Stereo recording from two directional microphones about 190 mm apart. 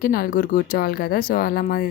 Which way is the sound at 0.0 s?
50° left (ahead or behind).